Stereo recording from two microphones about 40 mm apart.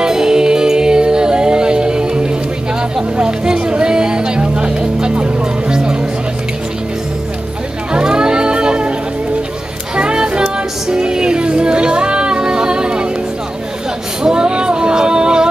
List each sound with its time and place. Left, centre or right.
0.0 s music: centre
7.9 s music: centre
9.9 s music: right
14.2 s music: right